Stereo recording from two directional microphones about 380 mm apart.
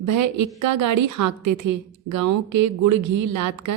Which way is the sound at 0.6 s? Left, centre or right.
Right.